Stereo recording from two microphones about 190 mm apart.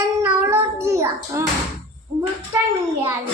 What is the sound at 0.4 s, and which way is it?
Child singing, 10° right (ahead or behind).